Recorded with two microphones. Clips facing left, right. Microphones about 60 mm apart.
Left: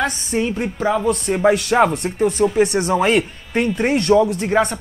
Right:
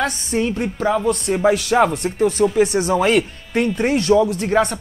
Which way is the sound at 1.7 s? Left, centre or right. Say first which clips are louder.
Even; left.